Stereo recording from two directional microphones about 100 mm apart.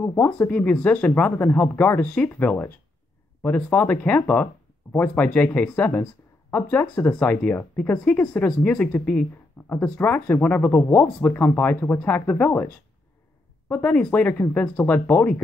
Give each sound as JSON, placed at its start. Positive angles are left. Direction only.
{"t": 0.0, "sound": "speech", "side_deg": 20}
{"t": 13.7, "sound": "speech", "side_deg": 15}